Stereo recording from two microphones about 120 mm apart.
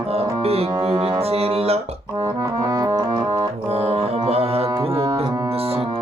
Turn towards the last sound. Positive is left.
turn(degrees=-55)  # may be behind; listen again after turning